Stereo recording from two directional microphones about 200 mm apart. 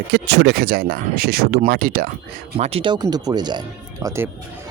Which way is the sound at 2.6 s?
30° right (ahead or behind).